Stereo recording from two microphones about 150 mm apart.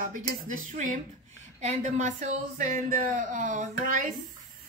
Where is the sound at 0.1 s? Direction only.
55° right (ahead or behind).